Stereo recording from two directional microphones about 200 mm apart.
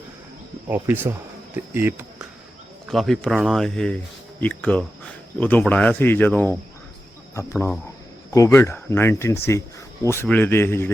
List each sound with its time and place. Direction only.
1.7 s speech: 10° right (ahead or behind)
2.9 s speech: centre (ahead or behind)